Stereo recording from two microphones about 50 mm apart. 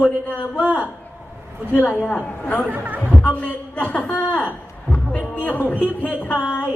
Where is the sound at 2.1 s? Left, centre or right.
Centre.